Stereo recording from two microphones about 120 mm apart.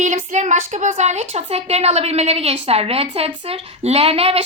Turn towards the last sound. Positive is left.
turn(degrees=-55)  # may be behind; listen again after turning